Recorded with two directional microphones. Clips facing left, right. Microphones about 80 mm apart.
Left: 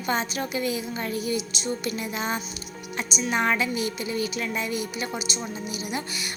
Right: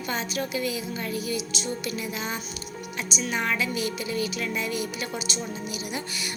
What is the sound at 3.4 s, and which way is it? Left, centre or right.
Music, left.